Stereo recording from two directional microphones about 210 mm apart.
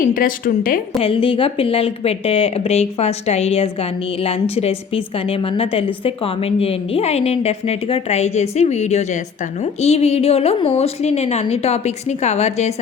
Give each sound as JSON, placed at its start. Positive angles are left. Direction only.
{"t": 0.0, "sound": "a woman's voice", "side_deg": 40}
{"t": 0.9, "sound": "a woman's voice", "side_deg": 25}